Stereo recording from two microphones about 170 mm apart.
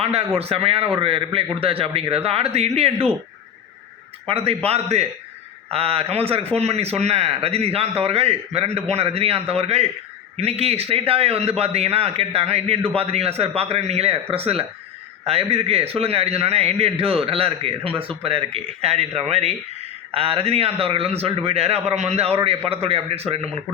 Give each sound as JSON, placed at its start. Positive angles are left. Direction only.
{"t": 0.0, "sound": "a man's voice", "side_deg": -35}
{"t": 4.3, "sound": "a man's voice", "side_deg": -35}